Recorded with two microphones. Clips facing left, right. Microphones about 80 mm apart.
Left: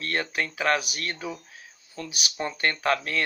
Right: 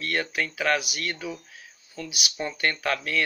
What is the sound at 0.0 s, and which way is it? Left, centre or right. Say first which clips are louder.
Speech: even; left.